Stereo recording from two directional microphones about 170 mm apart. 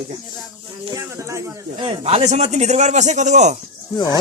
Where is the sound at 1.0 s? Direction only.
20° right (ahead or behind).